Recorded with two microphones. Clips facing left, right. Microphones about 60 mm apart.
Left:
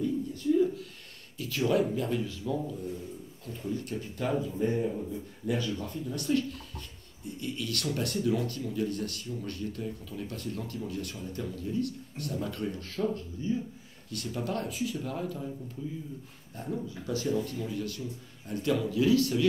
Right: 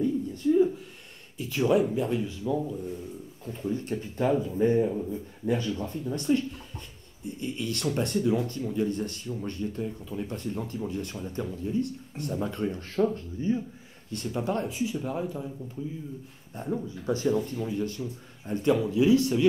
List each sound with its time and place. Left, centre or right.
0.0 s a sound: right
1.4 s speech: right
3.4 s speech: right
16.5 s speech: right